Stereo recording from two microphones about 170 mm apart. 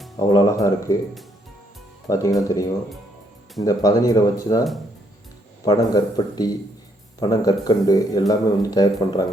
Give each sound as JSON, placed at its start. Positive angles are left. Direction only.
{"t": 0.2, "sound": "speech", "side_deg": 20}
{"t": 2.0, "sound": "speech", "side_deg": 20}
{"t": 5.6, "sound": "speech", "side_deg": 25}